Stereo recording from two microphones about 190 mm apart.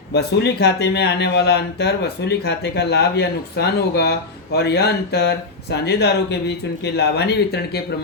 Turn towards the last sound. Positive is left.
turn(degrees=60)  # may be behind; listen again after turning